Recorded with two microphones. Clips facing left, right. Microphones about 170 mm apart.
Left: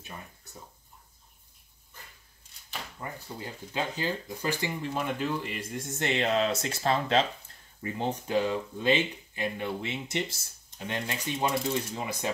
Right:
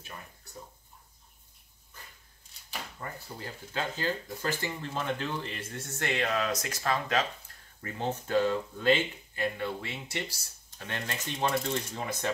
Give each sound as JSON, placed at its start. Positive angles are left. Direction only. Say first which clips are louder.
{"t": 3.0, "sound": "speech", "louder": "left 4 dB", "side_deg": 15}
{"t": 7.8, "sound": "speech", "louder": "left 2 dB", "side_deg": 15}